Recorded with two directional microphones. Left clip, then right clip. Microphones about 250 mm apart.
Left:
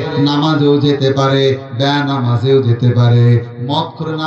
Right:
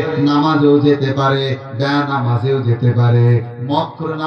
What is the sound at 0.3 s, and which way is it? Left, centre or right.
Mantra, left.